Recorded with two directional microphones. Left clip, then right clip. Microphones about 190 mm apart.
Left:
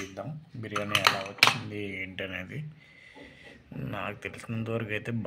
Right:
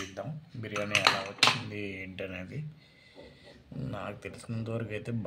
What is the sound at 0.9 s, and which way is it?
Speech, 35° left (ahead or behind).